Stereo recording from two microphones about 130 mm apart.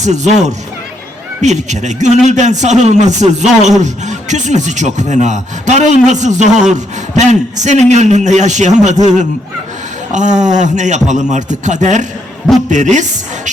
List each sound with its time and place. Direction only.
0.0 s a woman's voice: 60° right (ahead or behind)